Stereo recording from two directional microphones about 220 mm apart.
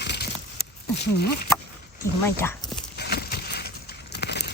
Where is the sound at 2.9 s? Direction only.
50° left (ahead or behind).